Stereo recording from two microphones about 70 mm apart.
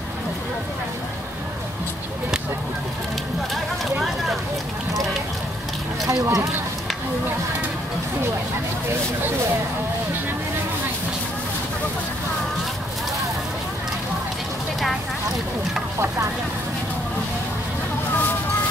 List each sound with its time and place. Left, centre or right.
6.0 s speech: right